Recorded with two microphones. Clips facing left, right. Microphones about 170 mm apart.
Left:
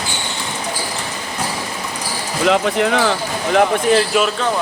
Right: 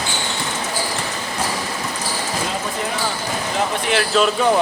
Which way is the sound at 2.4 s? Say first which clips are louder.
Left 9 dB; 80° left.